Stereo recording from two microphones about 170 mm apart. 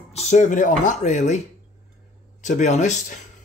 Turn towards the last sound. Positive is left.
turn(degrees=45)  # may be behind; listen again after turning